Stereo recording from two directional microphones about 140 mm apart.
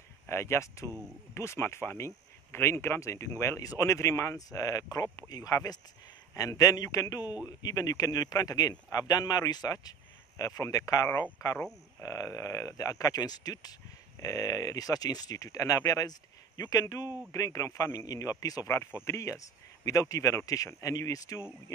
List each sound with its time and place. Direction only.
0.3 s speech: 20° left (ahead or behind)